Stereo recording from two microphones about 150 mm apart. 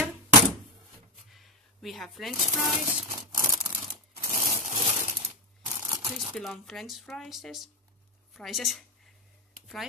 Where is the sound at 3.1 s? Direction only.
20° right (ahead or behind).